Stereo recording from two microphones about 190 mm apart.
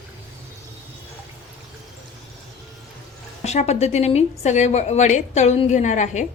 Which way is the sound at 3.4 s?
35° left (ahead or behind).